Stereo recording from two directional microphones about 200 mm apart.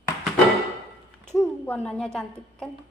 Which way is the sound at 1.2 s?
5° left (ahead or behind).